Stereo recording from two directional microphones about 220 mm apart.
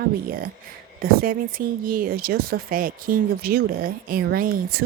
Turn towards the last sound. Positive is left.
turn(degrees=-40)  # may be behind; listen again after turning